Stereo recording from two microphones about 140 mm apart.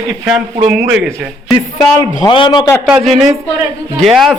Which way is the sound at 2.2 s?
30° left (ahead or behind).